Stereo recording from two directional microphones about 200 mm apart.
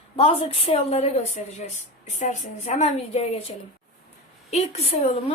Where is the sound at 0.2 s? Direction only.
30° left (ahead or behind).